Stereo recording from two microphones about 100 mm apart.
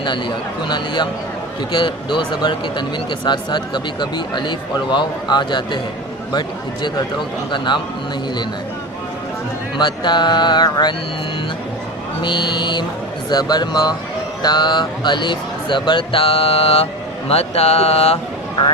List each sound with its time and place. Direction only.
1.7 s speech: 55° left (ahead or behind)
7.5 s speech: 50° left (ahead or behind)
9.7 s speech: 50° left (ahead or behind)
12.2 s speech: 50° left (ahead or behind); by 18.2 s 90° left